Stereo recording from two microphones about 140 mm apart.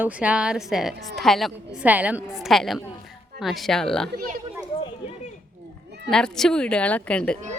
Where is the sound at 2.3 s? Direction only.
Centre (ahead or behind).